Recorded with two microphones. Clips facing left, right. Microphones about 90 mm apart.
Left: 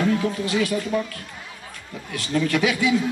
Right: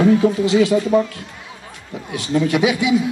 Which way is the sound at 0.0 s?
20° right (ahead or behind).